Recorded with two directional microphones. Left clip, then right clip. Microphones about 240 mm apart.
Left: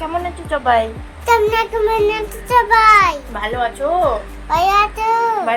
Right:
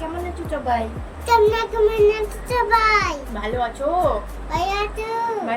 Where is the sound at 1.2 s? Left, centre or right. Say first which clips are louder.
Left 2 dB; centre.